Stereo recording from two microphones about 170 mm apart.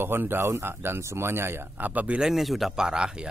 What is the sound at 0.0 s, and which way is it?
Speech, 15° right (ahead or behind).